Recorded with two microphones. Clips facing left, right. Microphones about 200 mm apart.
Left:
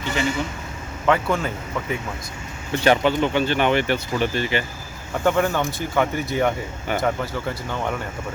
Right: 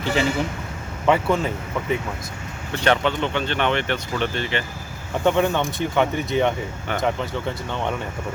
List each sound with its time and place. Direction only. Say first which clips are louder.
0.0 s a man's voice: right 3 dB; 35° right (ahead or behind)
1.0 s speech: right 1 dB; 5° right (ahead or behind)
2.8 s speech: left 2 dB; 5° left (ahead or behind)